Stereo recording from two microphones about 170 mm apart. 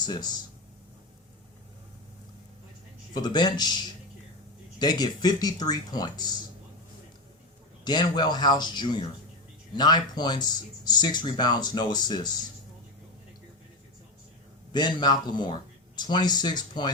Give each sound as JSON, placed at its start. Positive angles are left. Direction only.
{"t": 0.0, "sound": "speech", "side_deg": 25}
{"t": 3.2, "sound": "speech", "side_deg": 25}
{"t": 4.8, "sound": "speech", "side_deg": 25}
{"t": 7.9, "sound": "speech", "side_deg": 25}
{"t": 14.7, "sound": "speech", "side_deg": 25}